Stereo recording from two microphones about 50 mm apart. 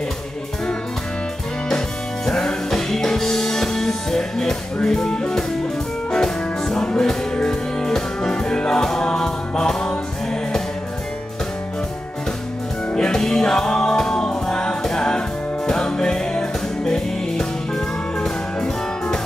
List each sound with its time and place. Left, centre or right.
2.2 s music: centre
4.8 s speech: centre
6.1 s music: centre
12.9 s music: centre